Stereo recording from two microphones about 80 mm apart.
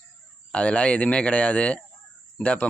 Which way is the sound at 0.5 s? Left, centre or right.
Centre.